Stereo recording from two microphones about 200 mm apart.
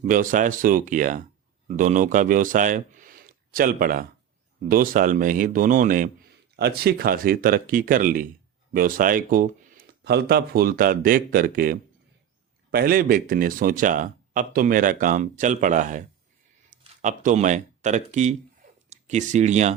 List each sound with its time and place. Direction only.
0.0 s a man's voice: 45° right (ahead or behind)
6.6 s speech: 55° right (ahead or behind); by 19.7 s 35° right (ahead or behind)